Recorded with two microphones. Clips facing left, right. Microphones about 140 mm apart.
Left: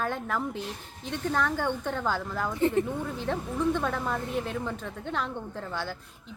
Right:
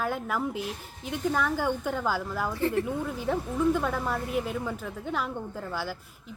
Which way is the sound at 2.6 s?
20° left (ahead or behind).